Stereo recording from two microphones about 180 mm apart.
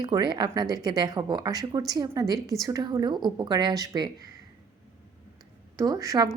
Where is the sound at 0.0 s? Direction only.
25° right (ahead or behind).